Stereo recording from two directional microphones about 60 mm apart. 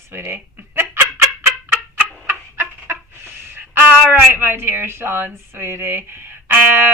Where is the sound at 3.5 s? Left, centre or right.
Right.